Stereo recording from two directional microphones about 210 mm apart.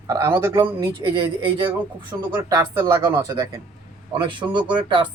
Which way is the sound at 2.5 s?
15° right (ahead or behind).